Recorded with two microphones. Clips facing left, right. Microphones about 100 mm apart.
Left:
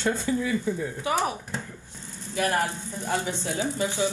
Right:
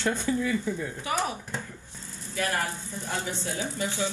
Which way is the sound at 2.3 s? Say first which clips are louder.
Left 4 dB; 25° left (ahead or behind).